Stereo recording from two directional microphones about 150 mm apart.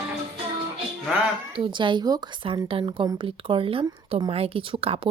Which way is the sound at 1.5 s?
35° right (ahead or behind).